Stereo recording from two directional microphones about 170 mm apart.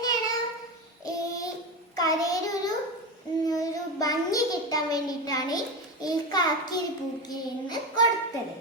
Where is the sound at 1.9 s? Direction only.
20° left (ahead or behind).